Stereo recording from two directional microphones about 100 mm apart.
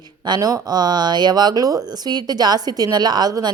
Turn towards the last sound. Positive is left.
turn(degrees=-40)  # may be behind; listen again after turning